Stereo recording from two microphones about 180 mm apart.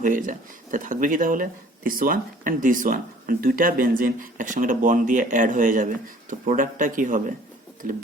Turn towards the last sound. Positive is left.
turn(degrees=-50)  # may be behind; listen again after turning